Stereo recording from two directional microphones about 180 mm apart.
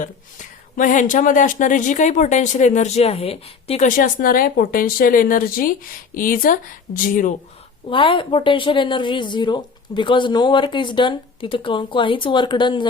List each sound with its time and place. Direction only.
0.8 s speech: 45° left (ahead or behind)
3.8 s speech: 50° left (ahead or behind)
7.9 s speech: 25° left (ahead or behind)